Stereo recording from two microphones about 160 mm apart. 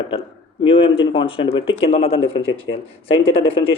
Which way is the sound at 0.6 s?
30° left (ahead or behind).